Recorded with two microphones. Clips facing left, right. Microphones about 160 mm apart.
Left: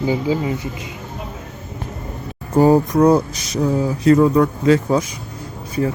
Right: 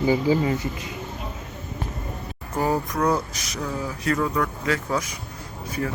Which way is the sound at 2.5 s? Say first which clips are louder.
Left 11 dB; 30° left (ahead or behind).